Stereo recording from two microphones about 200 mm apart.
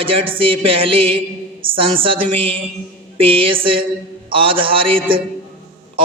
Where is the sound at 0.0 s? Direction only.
25° right (ahead or behind).